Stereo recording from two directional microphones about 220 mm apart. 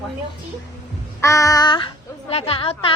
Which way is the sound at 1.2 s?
15° left (ahead or behind).